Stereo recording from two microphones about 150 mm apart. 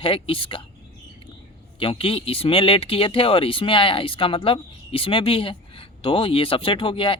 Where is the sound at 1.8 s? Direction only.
35° left (ahead or behind).